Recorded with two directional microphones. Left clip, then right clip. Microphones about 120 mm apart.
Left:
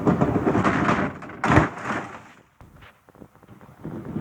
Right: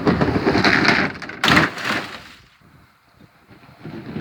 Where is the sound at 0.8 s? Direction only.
10° right (ahead or behind).